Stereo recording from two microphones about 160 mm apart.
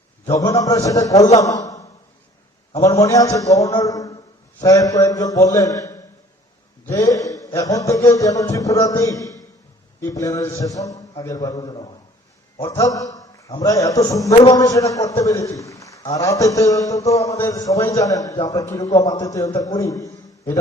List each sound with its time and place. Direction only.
0.3 s a man's voice: 20° left (ahead or behind)
1.4 s a sound: 20° left (ahead or behind)
2.8 s a man's voice: 20° left (ahead or behind)